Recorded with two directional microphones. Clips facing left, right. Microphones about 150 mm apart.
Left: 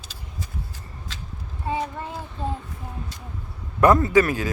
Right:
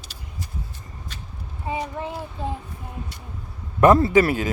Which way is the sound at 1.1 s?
90° left.